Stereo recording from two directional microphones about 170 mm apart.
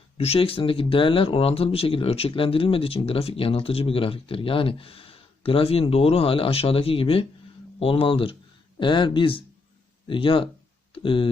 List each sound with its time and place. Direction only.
0.2 s speech: 35° left (ahead or behind)